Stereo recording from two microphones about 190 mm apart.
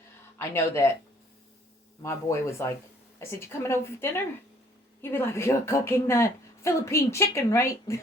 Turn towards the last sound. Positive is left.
turn(degrees=15)  # may be behind; listen again after turning